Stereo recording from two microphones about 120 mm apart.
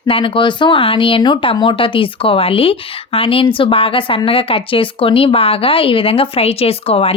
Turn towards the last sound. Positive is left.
turn(degrees=55)  # may be behind; listen again after turning